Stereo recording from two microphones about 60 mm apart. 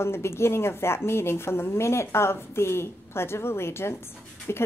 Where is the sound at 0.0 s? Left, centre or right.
Left.